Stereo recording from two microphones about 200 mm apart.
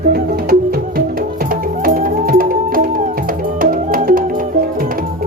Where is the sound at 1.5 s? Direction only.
45° right (ahead or behind).